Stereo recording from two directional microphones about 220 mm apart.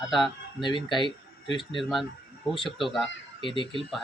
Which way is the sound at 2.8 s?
Centre (ahead or behind).